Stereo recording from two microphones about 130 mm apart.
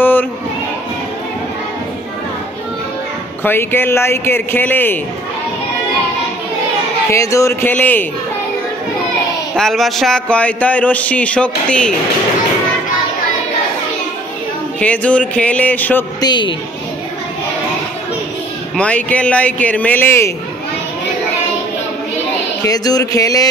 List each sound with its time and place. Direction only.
0.0 s crowd: 15° left (ahead or behind)
3.4 s speech: 15° left (ahead or behind)
7.1 s a sound: 25° left (ahead or behind)
7.7 s speech: 15° left (ahead or behind)
9.6 s speech: centre (ahead or behind)
14.8 s speech: 10° left (ahead or behind)
16.2 s a woman's voice: 35° left (ahead or behind)
18.8 s speech: 10° left (ahead or behind)
22.6 s a sound: 30° left (ahead or behind)